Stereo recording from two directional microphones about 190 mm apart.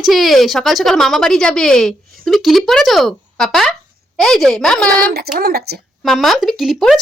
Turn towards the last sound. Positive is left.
turn(degrees=0)  # may be behind; listen again after turning